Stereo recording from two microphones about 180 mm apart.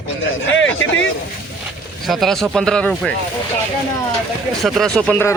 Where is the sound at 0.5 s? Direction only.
90° left.